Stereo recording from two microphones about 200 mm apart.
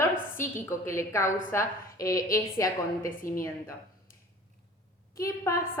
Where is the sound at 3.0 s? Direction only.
45° left (ahead or behind).